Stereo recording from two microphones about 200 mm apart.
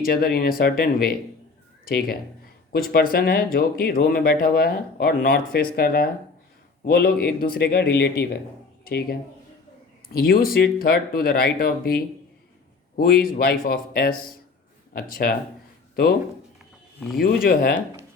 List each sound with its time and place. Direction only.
0.0 s speech: 50° left (ahead or behind)
17.2 s speech: 45° left (ahead or behind)